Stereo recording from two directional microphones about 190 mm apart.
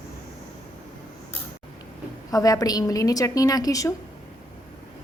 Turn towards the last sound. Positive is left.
turn(degrees=20)  # may be behind; listen again after turning